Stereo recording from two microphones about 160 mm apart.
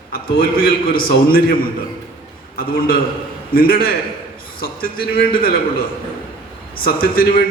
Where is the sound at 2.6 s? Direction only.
70° left (ahead or behind).